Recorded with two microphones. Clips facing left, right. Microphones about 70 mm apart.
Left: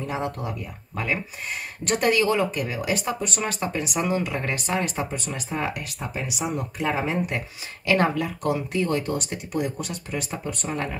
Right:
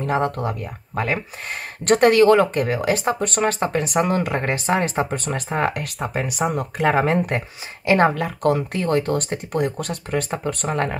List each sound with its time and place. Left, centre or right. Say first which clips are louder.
0.0 s speech: right 7 dB; right
5.1 s speech: right 6 dB; right
7.8 s speech: right 5 dB; right
8.1 s speech: right 5 dB; right